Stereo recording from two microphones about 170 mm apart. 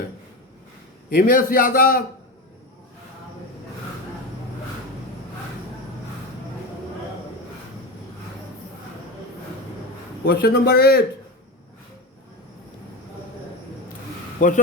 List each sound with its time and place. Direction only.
1.1 s a man's voice: 55° left (ahead or behind)
10.2 s a man's voice: 65° left (ahead or behind)
14.3 s speech: 50° left (ahead or behind)